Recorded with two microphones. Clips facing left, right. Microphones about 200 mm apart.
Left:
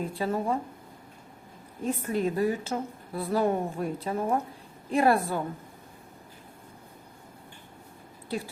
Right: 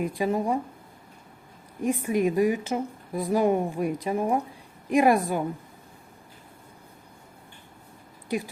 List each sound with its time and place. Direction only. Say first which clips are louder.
0.0 s a woman's voice: right 3 dB; 15° right (ahead or behind)
1.8 s a woman's voice: right 4 dB; 15° right (ahead or behind)
8.3 s a woman's voice: right 4 dB; 15° right (ahead or behind)